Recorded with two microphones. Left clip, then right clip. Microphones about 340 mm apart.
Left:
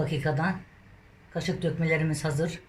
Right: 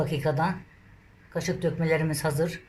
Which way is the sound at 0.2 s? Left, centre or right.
Centre.